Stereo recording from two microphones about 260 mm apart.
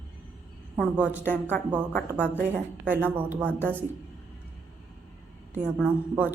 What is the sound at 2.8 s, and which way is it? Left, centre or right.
Speech, centre.